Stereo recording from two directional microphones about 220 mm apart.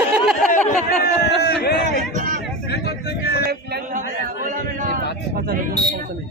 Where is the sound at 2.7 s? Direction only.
50° left (ahead or behind).